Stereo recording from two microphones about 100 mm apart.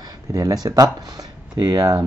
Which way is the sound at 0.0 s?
35° right (ahead or behind).